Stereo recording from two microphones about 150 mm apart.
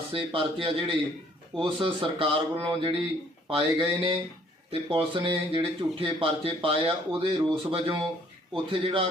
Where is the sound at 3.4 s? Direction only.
35° right (ahead or behind).